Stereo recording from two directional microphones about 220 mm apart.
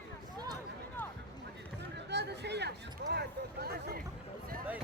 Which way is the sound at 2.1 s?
50° right (ahead or behind).